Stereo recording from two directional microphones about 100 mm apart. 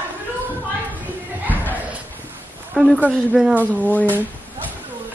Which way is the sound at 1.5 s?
15° left (ahead or behind).